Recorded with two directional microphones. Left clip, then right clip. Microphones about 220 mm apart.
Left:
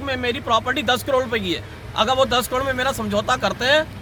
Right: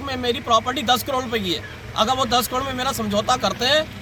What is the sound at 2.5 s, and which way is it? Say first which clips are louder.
Speech: left 2 dB; 15° left (ahead or behind).